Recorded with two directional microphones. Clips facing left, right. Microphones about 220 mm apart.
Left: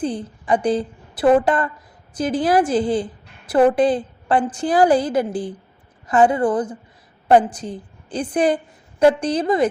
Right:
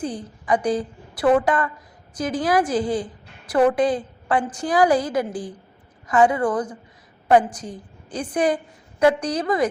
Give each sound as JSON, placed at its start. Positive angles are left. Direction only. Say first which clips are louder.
{"t": 0.0, "sound": "a woman's voice", "louder": "left 4 dB", "side_deg": 30}